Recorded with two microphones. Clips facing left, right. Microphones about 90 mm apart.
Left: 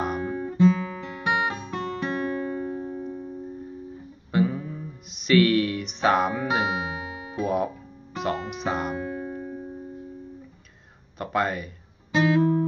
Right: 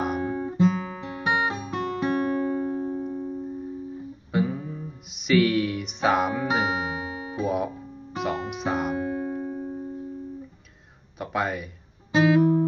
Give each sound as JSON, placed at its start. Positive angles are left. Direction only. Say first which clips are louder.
{"t": 0.2, "sound": "guitar", "louder": "left 4 dB", "side_deg": -20}
{"t": 3.1, "sound": "music", "louder": "right 4 dB", "side_deg": -10}
{"t": 4.3, "sound": "music", "louder": "left 2 dB", "side_deg": 0}
{"t": 7.0, "sound": "music", "louder": "right 3 dB", "side_deg": -35}
{"t": 7.3, "sound": "music", "louder": "left 1 dB", "side_deg": 0}
{"t": 8.9, "sound": "music", "louder": "right 3 dB", "side_deg": -20}
{"t": 11.1, "sound": "a sound", "louder": "left 2 dB", "side_deg": 0}
{"t": 12.1, "sound": "music", "louder": "right 2 dB", "side_deg": -15}